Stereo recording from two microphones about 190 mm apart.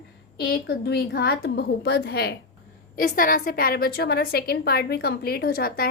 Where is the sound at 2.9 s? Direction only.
50° left (ahead or behind).